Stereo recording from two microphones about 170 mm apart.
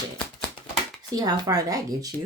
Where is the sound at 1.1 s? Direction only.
20° right (ahead or behind).